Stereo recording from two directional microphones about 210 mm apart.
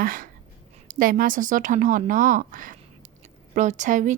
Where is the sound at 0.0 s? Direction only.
40° right (ahead or behind).